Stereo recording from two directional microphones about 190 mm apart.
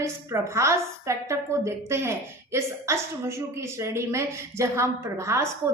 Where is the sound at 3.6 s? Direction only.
15° right (ahead or behind).